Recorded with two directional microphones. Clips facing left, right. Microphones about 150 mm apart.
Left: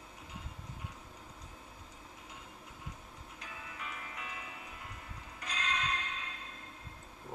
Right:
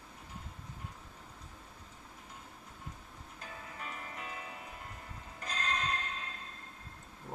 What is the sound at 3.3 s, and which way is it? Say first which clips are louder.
Music: right 1 dB; 40° right (ahead or behind).